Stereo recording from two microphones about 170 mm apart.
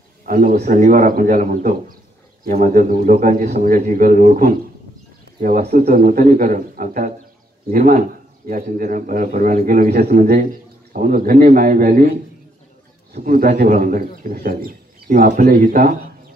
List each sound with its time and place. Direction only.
0.2 s speech: 55° right (ahead or behind)
5.6 s speech: 40° right (ahead or behind)
5.9 s a man's voice: 55° right (ahead or behind)
13.2 s speech: 55° right (ahead or behind)